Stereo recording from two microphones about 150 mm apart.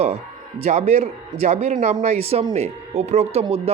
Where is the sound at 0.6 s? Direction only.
45° right (ahead or behind).